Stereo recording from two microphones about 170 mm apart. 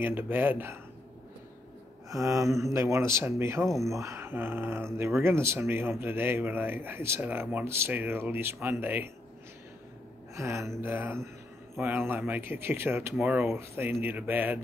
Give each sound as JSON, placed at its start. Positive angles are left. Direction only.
{"t": 0.0, "sound": "speech", "side_deg": -10}
{"t": 2.0, "sound": "speech", "side_deg": -20}
{"t": 10.3, "sound": "speech", "side_deg": -15}